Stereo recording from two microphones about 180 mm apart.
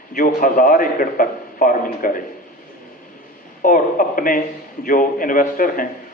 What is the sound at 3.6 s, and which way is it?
A man's voice, 50° left (ahead or behind).